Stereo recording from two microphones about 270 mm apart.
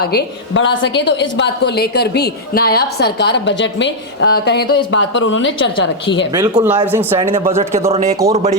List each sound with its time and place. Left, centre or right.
0.0 s a woman's voice: left
6.3 s speech: centre
7.2 s speech: centre